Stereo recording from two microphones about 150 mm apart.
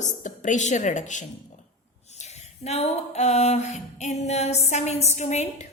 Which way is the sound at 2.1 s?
45° left (ahead or behind).